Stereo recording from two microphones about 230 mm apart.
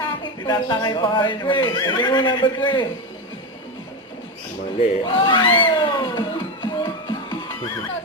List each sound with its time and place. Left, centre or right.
0.4 s speech: centre
5.0 s music: left